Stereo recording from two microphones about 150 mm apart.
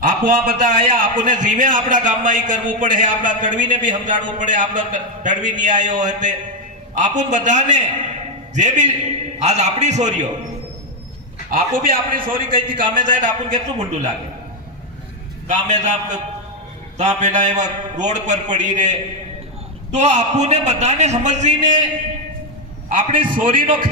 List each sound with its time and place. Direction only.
0.0 s a man's voice: 65° right (ahead or behind)
11.5 s a man's voice: 70° right (ahead or behind)
12.2 s a man's voice: 35° right (ahead or behind)
13.0 s a man's voice: 60° right (ahead or behind)
15.4 s a man's voice: 50° right (ahead or behind)
23.0 s a man's voice: 65° right (ahead or behind)